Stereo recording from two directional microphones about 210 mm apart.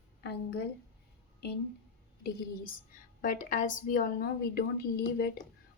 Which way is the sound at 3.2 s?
40° left (ahead or behind).